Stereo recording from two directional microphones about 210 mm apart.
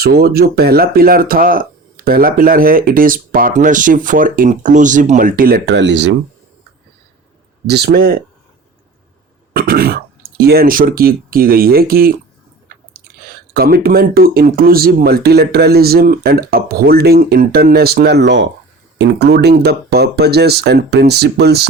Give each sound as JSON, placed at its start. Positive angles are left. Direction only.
{"t": 0.0, "sound": "speech", "side_deg": -50}
{"t": 7.7, "sound": "speech", "side_deg": -50}
{"t": 9.5, "sound": "speech", "side_deg": -45}
{"t": 13.5, "sound": "speech", "side_deg": -50}